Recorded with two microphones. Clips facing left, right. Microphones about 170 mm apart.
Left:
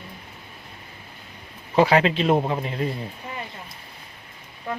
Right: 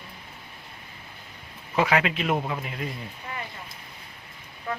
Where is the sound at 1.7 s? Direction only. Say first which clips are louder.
Left 6 dB; 30° left (ahead or behind).